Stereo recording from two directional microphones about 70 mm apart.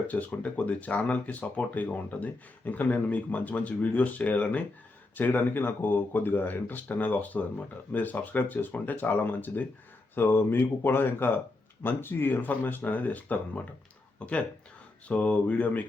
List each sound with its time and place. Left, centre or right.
0.1 s speech: left